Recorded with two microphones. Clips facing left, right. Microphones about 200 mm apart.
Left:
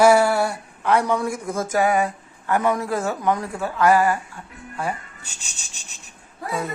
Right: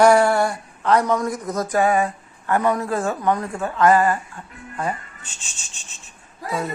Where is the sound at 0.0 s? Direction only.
5° left (ahead or behind).